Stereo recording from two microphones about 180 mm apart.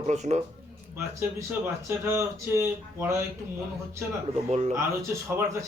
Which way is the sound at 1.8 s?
15° right (ahead or behind).